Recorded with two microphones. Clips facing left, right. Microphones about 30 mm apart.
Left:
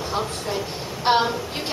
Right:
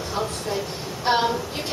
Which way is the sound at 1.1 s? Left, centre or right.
Left.